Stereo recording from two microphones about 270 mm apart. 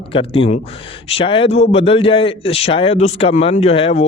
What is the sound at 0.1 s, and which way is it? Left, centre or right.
A man's voice, centre.